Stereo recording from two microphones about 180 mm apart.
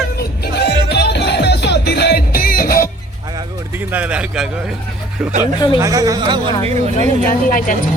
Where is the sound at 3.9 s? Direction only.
5° right (ahead or behind).